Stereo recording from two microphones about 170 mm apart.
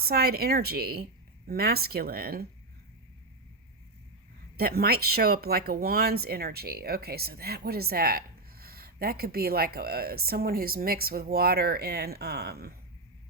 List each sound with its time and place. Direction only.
0.0 s speech: 65° right (ahead or behind)
4.5 s speech: 65° right (ahead or behind)